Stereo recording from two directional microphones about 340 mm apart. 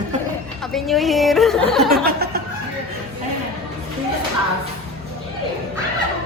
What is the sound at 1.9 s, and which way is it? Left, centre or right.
Speech, right.